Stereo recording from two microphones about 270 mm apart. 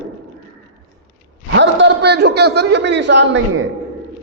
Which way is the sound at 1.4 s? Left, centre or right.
Right.